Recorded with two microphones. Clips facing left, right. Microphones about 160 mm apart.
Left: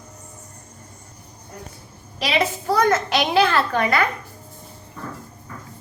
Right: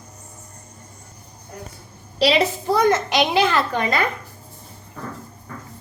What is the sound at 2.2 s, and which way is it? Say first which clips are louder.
A child's voice: right 4 dB; 30° right (ahead or behind).